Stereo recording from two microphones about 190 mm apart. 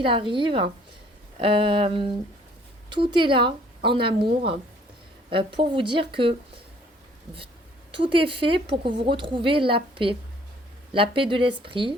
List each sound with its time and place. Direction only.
0.0 s a woman's voice: 25° right (ahead or behind)
7.9 s a woman's voice: 25° right (ahead or behind)